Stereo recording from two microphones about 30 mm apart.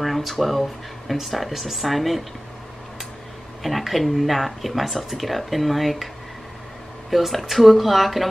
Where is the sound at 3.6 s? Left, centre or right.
Centre.